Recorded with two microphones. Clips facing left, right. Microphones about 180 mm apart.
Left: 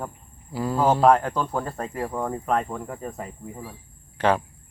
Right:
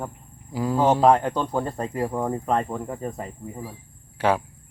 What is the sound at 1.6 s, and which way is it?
Speech, 25° right (ahead or behind).